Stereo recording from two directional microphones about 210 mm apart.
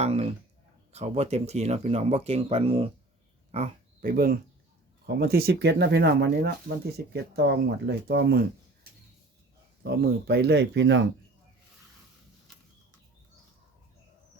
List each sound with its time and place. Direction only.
0.0 s speech: 30° right (ahead or behind)
4.0 s speech: 45° right (ahead or behind); by 11.0 s 60° right (ahead or behind)